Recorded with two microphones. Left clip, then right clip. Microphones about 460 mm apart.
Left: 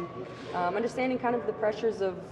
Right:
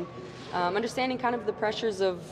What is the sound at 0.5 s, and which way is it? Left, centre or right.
A woman's voice, right.